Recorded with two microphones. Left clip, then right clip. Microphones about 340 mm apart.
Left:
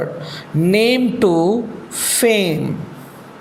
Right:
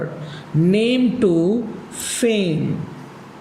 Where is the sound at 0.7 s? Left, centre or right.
Centre.